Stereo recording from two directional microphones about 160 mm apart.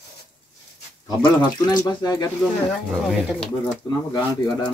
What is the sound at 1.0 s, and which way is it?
Speech, 25° left (ahead or behind).